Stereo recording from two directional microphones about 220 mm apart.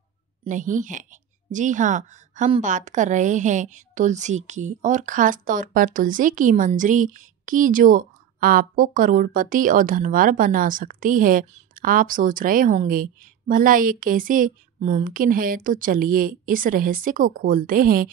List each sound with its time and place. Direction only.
0.4 s a woman's voice: 35° right (ahead or behind)